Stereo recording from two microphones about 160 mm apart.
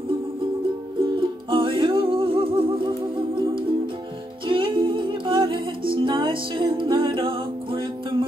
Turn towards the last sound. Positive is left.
turn(degrees=-30)  # may be behind; listen again after turning